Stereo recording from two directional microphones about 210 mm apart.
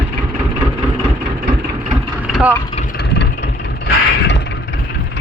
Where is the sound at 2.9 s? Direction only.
55° left (ahead or behind).